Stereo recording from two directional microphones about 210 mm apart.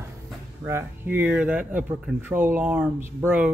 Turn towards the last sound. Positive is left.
turn(degrees=-10)  # may be behind; listen again after turning